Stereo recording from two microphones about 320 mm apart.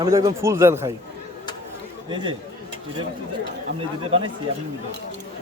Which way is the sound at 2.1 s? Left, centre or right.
Centre.